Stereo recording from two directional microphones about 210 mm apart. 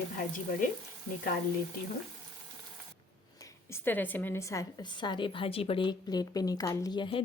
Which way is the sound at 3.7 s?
10° left (ahead or behind).